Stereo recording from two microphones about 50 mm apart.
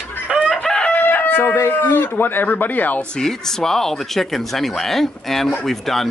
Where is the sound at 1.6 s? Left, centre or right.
Left.